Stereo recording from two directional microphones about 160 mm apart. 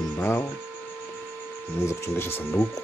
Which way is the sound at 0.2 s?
15° left (ahead or behind).